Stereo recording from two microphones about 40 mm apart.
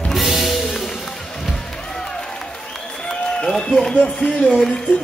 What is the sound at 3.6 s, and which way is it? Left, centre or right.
Run, centre.